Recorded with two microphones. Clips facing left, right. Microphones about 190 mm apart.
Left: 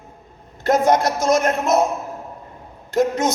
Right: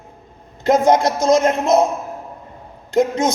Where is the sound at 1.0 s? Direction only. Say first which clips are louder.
Right 3 dB; 20° right (ahead or behind).